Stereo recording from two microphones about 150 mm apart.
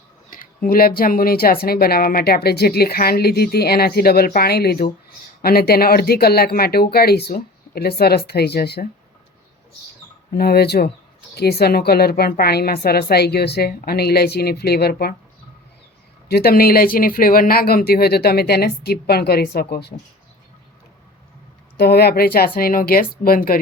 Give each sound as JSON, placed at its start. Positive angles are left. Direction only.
{"t": 0.3, "sound": "speech", "side_deg": 65}
{"t": 10.3, "sound": "speech", "side_deg": 90}
{"t": 16.3, "sound": "speech", "side_deg": 85}
{"t": 21.8, "sound": "speech", "side_deg": 90}